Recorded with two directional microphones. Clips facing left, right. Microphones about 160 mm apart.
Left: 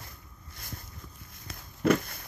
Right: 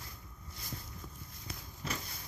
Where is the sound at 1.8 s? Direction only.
65° left (ahead or behind).